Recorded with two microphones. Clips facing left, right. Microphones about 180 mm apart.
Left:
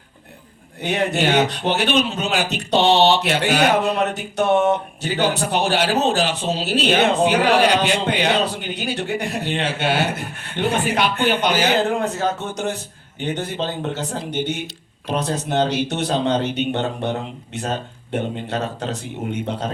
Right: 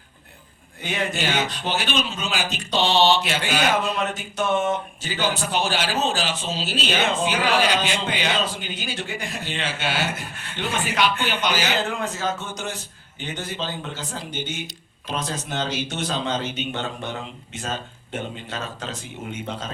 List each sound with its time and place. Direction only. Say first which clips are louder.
0.8 s speech: left 6 dB; 65° left (ahead or behind); by 12.0 s 45° left (ahead or behind)
12.0 s speech: left 5 dB; 60° left (ahead or behind)